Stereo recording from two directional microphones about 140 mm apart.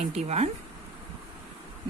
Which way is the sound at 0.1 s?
50° right (ahead or behind).